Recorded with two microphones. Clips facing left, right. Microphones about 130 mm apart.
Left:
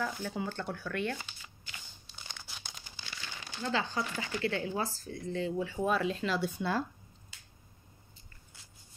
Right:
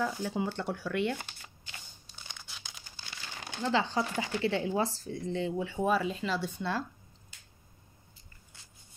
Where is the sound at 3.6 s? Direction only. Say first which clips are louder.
Right 4 dB; 25° right (ahead or behind).